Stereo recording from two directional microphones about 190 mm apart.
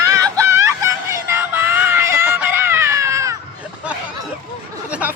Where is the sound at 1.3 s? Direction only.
10° right (ahead or behind).